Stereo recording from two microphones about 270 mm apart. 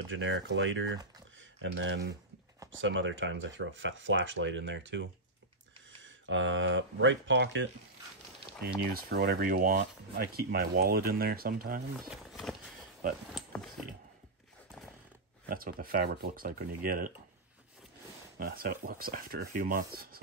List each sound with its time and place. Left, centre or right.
0.1 s speech: right
6.2 s speech: right
8.9 s speech: right
12.1 s speech: centre
15.4 s speech: right
18.4 s speech: right